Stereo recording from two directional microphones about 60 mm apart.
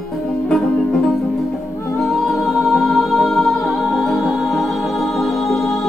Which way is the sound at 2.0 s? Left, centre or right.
Centre.